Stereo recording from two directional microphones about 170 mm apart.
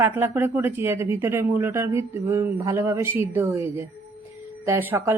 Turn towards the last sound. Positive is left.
turn(degrees=-15)  # may be behind; listen again after turning